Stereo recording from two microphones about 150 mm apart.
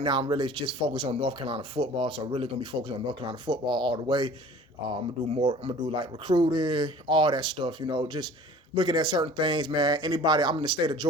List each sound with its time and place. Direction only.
0.0 s speech: 30° right (ahead or behind)
5.4 s speech: 30° right (ahead or behind)